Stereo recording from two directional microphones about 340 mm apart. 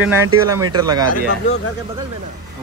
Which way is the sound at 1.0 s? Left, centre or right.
Left.